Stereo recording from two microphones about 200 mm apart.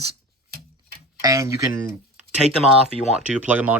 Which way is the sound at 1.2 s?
15° right (ahead or behind).